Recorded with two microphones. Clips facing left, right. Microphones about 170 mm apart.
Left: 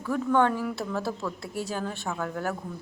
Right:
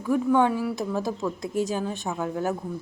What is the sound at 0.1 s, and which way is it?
Speech, 15° right (ahead or behind).